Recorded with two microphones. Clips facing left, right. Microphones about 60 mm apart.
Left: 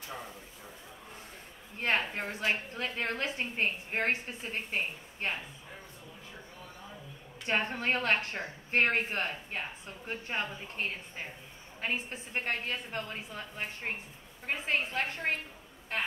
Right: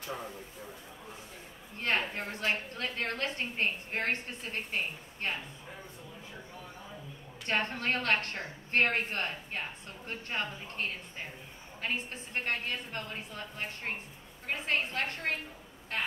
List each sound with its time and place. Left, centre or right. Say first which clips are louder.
1.8 s a woman's voice: left 1 dB; centre
7.4 s a woman's voice: left 1 dB; centre